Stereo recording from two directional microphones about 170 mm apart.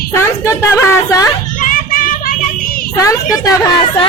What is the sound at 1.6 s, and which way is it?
Child singing, 55° left (ahead or behind).